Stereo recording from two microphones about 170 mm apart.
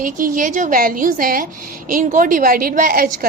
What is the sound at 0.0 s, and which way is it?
A woman's voice, 50° right (ahead or behind).